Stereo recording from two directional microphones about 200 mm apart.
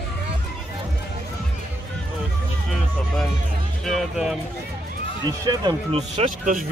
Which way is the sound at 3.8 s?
Centre (ahead or behind).